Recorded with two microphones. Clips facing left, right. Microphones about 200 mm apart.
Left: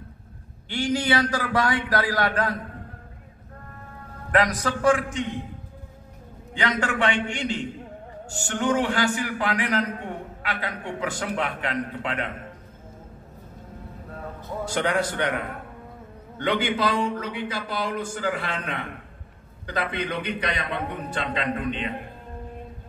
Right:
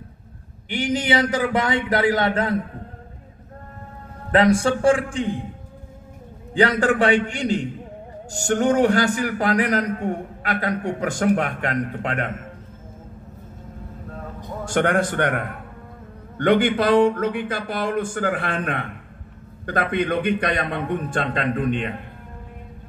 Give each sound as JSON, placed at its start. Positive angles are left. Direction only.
{"t": 0.7, "sound": "a man's voice", "side_deg": -20}
{"t": 4.3, "sound": "a man's voice", "side_deg": -30}
{"t": 6.5, "sound": "a man's voice", "side_deg": -35}
{"t": 14.7, "sound": "a man's voice", "side_deg": -50}